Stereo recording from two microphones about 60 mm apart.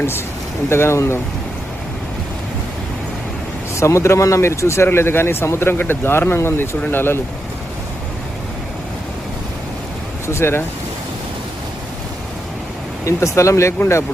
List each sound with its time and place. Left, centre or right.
0.7 s speech: left
3.8 s speech: left
4.9 s speech: left
10.2 s speech: left
13.1 s speech: left